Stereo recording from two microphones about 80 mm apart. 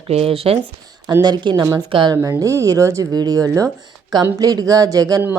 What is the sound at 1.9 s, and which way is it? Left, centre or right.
Speech, right.